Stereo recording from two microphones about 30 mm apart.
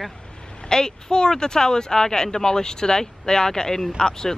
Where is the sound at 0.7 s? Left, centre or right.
Left.